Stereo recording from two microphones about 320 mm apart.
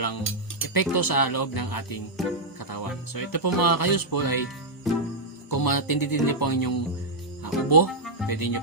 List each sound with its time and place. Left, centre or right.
0.7 s speech: left
2.2 s speech: centre
2.6 s speech: left
4.9 s music: centre
5.5 s speech: left